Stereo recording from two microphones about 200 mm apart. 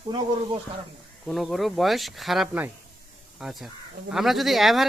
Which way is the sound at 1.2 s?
Centre (ahead or behind).